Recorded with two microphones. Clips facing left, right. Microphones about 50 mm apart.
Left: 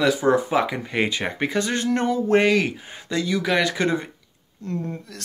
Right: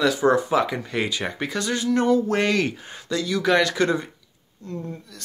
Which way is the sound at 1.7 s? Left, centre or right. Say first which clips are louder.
Right 1 dB; left.